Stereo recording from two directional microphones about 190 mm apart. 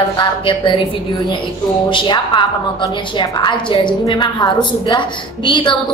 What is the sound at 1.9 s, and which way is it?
A woman's voice, 25° left (ahead or behind).